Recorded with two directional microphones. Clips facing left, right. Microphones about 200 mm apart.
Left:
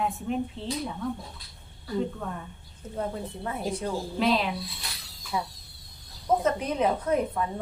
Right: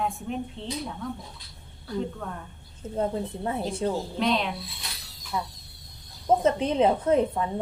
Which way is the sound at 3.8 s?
25° right (ahead or behind).